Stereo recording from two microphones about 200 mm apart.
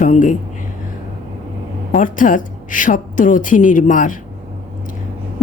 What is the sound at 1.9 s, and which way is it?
Speech, 40° left (ahead or behind).